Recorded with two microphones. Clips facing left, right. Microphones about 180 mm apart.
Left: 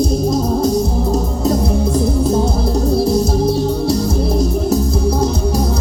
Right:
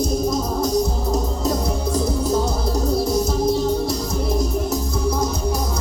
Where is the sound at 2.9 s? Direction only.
30° left (ahead or behind).